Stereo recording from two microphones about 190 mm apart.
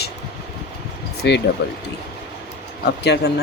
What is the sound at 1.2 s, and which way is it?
Speech, 60° left (ahead or behind).